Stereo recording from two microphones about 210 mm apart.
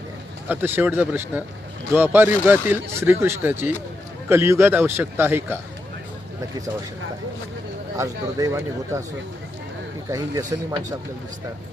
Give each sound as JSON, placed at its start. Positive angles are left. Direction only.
{"t": 0.4, "sound": "speech", "side_deg": -10}
{"t": 7.9, "sound": "speech", "side_deg": -15}
{"t": 10.1, "sound": "speech", "side_deg": -15}